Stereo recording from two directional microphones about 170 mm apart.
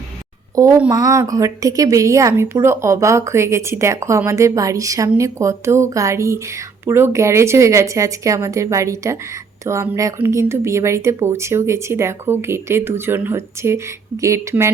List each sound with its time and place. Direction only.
0.5 s a woman's voice: 20° right (ahead or behind)